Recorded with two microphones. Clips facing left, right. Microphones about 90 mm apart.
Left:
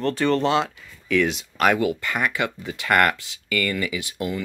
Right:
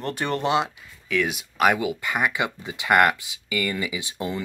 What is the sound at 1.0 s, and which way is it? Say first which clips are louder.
Speech: left 4 dB; 5° right (ahead or behind).